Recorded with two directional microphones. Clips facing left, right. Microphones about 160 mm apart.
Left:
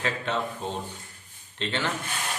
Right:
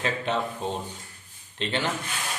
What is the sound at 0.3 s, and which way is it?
Speech, 15° right (ahead or behind).